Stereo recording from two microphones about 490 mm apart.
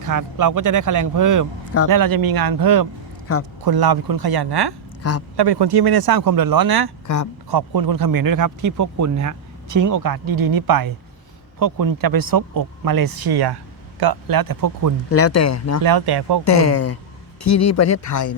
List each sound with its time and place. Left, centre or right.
0.0 s speech: right
5.0 s a man's voice: left
5.4 s speech: right
15.1 s speech: left
15.8 s speech: right
16.4 s speech: left